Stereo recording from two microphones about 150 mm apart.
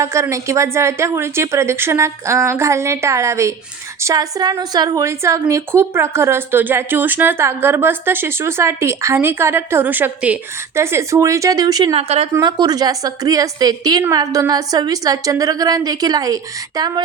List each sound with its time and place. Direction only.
0.0 s a woman's voice: 20° right (ahead or behind)
11.9 s a woman's voice: 40° right (ahead or behind)
12.3 s a woman's voice: 30° right (ahead or behind)